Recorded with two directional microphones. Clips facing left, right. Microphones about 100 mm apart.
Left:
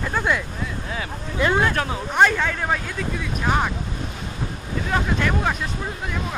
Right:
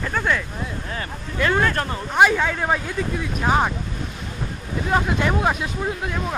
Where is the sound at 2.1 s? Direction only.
5° right (ahead or behind).